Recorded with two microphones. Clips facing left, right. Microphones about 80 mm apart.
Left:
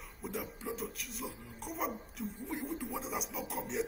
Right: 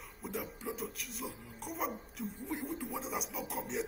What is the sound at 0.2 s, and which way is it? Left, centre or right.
Speech, centre.